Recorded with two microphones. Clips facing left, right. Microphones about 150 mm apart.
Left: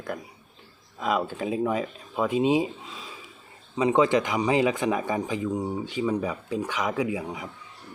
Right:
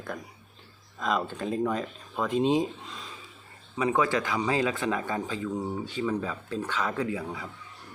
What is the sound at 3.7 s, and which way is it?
Speech, 20° left (ahead or behind).